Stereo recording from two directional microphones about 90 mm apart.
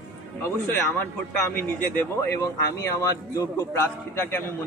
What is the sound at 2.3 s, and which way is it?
A man's voice, 35° left (ahead or behind).